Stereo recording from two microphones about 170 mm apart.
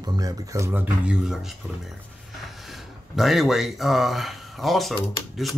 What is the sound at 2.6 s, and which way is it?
Speech, centre (ahead or behind).